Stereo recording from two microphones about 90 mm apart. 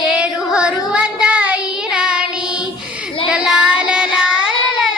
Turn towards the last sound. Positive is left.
turn(degrees=-10)  # may be behind; listen again after turning